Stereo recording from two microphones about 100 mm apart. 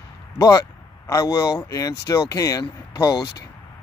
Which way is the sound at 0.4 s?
35° left (ahead or behind).